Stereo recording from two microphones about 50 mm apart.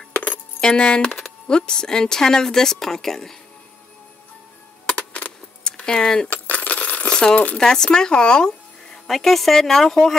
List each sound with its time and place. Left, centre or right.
0.6 s speech: centre
4.9 s keys jangling: left
5.6 s a sound: centre
6.3 s coin: left
7.1 s crumpling: centre
7.5 s speech: centre